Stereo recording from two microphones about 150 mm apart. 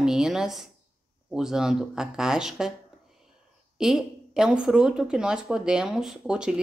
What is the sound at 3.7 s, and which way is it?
A woman's voice, 5° right (ahead or behind).